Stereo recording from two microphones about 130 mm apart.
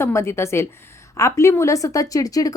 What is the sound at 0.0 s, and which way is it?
Speech, 20° left (ahead or behind).